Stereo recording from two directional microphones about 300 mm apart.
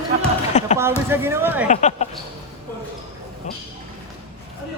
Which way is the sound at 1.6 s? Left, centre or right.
Left.